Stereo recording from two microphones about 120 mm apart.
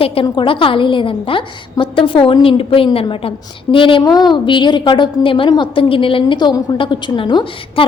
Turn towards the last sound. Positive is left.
turn(degrees=45)  # may be behind; listen again after turning